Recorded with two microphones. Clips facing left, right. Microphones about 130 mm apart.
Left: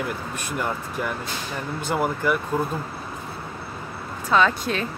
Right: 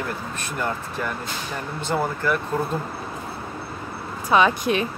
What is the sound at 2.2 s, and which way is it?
Speech, 10° left (ahead or behind).